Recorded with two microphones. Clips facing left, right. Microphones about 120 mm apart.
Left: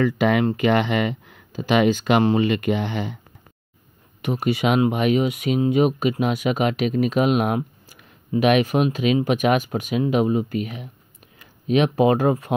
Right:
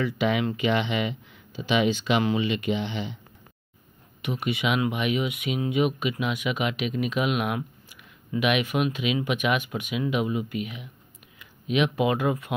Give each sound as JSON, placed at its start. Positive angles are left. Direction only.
{"t": 0.0, "sound": "speech", "side_deg": 50}
{"t": 4.2, "sound": "speech", "side_deg": 40}